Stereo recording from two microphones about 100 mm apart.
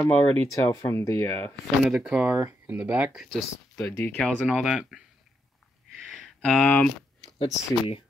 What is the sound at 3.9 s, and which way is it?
Speech, 10° left (ahead or behind).